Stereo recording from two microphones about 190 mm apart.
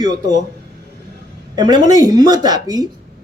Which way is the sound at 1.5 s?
20° right (ahead or behind).